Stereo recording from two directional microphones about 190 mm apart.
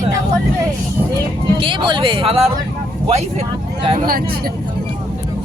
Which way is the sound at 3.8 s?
25° right (ahead or behind).